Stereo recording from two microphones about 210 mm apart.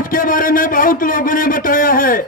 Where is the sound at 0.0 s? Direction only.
40° left (ahead or behind).